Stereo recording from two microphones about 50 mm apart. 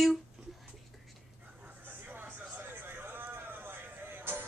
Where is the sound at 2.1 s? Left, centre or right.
Right.